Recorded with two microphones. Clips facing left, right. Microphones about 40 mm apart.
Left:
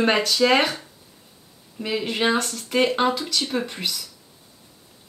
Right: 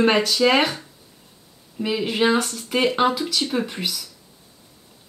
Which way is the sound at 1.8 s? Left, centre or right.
Centre.